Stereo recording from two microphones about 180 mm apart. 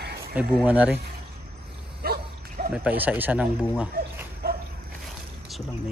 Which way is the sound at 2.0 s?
55° right (ahead or behind).